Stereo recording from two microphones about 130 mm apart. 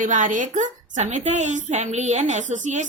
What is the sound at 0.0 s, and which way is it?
A woman's voice, 80° right.